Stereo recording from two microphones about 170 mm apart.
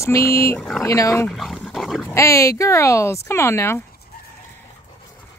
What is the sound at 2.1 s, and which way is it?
Speech, 15° left (ahead or behind).